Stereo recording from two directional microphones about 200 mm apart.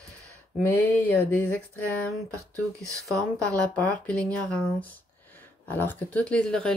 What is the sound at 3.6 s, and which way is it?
Speech, 5° left (ahead or behind).